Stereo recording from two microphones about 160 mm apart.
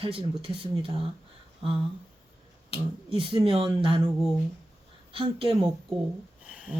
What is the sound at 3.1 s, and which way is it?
Speech, 35° right (ahead or behind).